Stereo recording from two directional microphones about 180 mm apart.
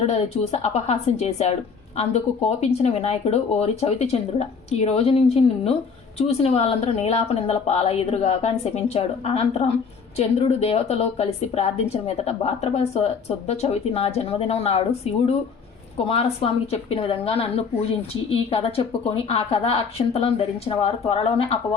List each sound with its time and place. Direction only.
0.0 s a woman's voice: 35° left (ahead or behind)